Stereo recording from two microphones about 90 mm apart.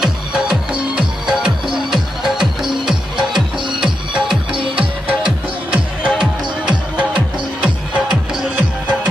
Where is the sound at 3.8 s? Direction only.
10° right (ahead or behind).